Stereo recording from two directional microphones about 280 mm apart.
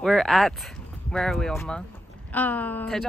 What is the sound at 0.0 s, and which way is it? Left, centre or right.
Speech, centre.